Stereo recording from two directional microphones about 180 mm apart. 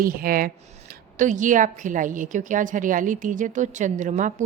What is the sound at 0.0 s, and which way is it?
A woman's voice, 50° right (ahead or behind).